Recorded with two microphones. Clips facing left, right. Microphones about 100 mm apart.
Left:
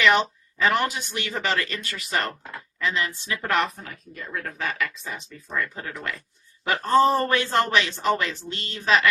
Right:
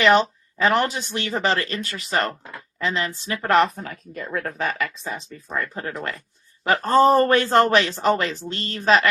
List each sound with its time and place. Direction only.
0.6 s speech: 30° right (ahead or behind)
4.5 s speech: 35° right (ahead or behind)